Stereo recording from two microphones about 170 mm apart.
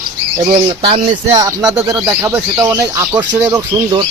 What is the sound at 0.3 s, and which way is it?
Speech, 30° right (ahead or behind).